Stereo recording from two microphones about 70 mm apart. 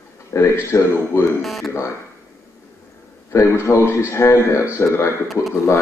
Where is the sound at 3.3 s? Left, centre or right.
Left.